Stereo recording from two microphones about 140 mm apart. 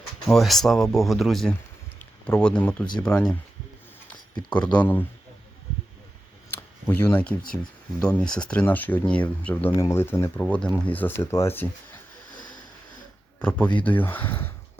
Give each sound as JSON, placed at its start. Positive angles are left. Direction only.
{"t": 0.3, "sound": "speech", "side_deg": 0}
{"t": 4.5, "sound": "speech", "side_deg": 10}
{"t": 6.5, "sound": "a sound", "side_deg": 15}
{"t": 8.0, "sound": "speech", "side_deg": 5}
{"t": 13.4, "sound": "speech", "side_deg": 10}